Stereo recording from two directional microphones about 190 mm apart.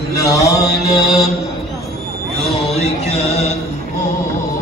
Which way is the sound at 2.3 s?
Centre (ahead or behind).